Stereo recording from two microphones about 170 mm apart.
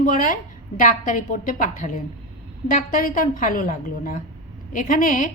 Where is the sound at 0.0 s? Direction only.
50° left (ahead or behind).